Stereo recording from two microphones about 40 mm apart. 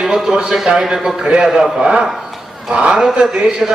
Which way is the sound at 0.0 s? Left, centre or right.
Centre.